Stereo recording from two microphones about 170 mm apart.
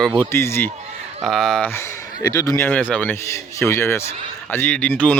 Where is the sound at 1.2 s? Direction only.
5° left (ahead or behind).